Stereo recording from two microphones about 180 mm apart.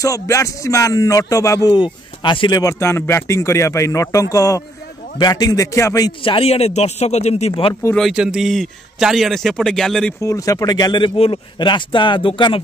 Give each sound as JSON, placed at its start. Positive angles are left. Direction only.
{"t": 0.0, "sound": "music", "side_deg": 15}
{"t": 5.2, "sound": "a man's voice", "side_deg": 20}
{"t": 7.9, "sound": "a man's voice", "side_deg": 0}
{"t": 10.2, "sound": "speech", "side_deg": 20}